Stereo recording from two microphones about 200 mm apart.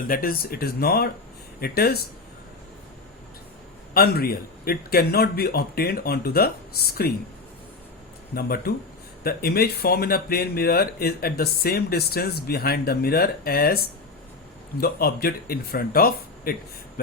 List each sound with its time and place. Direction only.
0.1 s speech: 45° left (ahead or behind)
3.9 s speech: 50° left (ahead or behind)
8.4 s speech: 50° left (ahead or behind)
14.8 s speech: 50° left (ahead or behind)